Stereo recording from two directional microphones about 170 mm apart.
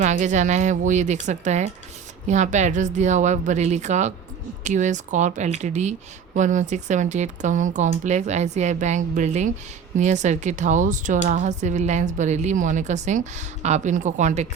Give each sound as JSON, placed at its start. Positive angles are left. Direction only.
{"t": 0.0, "sound": "speech", "side_deg": -45}